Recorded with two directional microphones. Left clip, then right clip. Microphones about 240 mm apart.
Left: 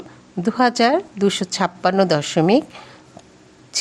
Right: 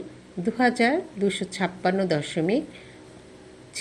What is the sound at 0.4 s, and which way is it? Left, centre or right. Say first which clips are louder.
A woman's voice: left 6 dB; left.